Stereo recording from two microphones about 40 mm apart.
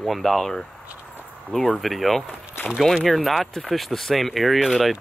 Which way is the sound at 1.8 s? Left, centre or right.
Centre.